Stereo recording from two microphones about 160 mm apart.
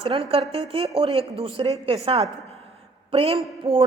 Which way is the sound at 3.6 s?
20° right (ahead or behind).